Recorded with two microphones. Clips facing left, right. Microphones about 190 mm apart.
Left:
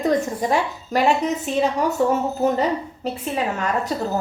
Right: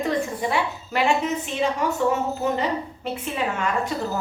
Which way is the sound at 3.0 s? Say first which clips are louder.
Left 3 dB; 40° left (ahead or behind).